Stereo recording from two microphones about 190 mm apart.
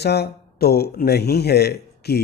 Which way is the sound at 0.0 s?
60° left (ahead or behind).